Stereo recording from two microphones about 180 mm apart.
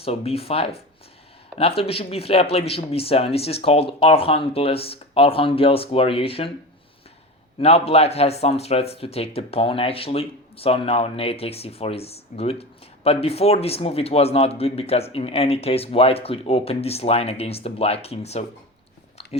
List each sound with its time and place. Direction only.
0.0 s a man's voice: 35° left (ahead or behind)
7.6 s a man's voice: 35° left (ahead or behind)